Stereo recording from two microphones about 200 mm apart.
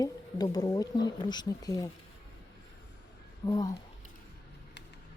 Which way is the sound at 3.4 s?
20° left (ahead or behind).